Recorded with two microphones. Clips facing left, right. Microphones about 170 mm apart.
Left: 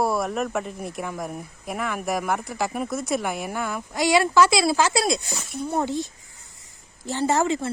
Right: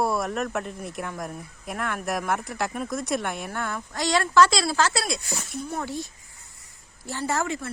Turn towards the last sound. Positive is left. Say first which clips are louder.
# left 6 dB
turn(degrees=25)  # may be behind; listen again after turning